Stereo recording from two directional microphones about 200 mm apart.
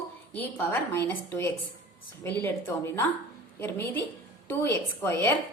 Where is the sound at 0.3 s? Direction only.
10° left (ahead or behind).